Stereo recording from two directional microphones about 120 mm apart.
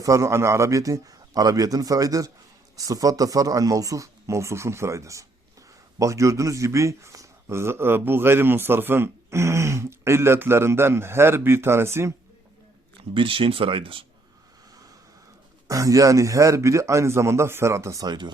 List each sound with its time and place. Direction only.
0.0 s a man's voice: 25° right (ahead or behind)
13.1 s speech: 45° right (ahead or behind)
15.6 s a man's voice: 30° right (ahead or behind)